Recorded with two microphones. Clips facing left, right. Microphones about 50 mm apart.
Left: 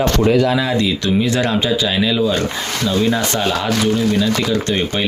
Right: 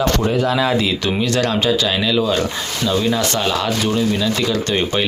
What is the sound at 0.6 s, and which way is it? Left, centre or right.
Speech, centre.